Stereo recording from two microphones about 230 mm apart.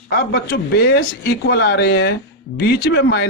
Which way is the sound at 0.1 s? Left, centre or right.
Left.